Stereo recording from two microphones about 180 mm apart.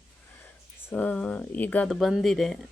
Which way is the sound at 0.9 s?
10° left (ahead or behind).